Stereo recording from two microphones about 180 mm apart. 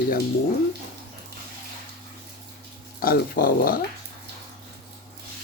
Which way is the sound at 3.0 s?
55° left (ahead or behind).